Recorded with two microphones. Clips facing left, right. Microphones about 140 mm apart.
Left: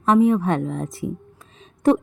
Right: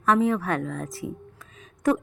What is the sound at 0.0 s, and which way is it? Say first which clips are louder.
A woman's voice: left 5 dB; 20° left (ahead or behind).